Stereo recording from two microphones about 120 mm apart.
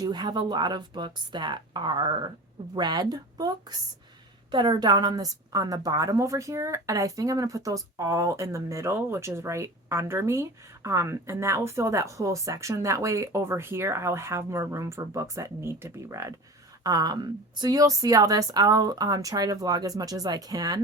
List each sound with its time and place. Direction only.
0.0 s a woman's voice: 35° right (ahead or behind)